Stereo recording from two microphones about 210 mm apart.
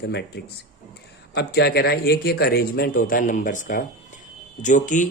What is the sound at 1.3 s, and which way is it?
Speech, 50° left (ahead or behind).